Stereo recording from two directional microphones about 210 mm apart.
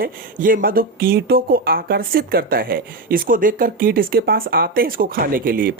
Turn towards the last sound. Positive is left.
turn(degrees=-45)  # may be behind; listen again after turning